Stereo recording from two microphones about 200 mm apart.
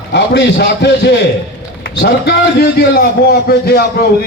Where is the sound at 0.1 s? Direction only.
60° left (ahead or behind).